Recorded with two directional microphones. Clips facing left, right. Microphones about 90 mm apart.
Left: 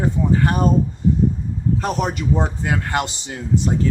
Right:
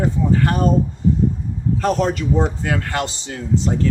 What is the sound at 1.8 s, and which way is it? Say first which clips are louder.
A man's voice: right 5 dB; 20° left (ahead or behind).